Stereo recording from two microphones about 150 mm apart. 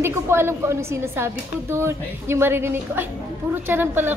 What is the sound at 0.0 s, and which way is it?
A woman's voice, 15° right (ahead or behind).